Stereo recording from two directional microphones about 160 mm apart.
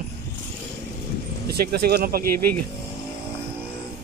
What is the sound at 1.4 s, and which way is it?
Speech, 75° right (ahead or behind).